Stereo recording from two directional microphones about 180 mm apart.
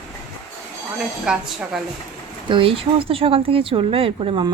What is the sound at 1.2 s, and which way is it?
Speech, 5° right (ahead or behind).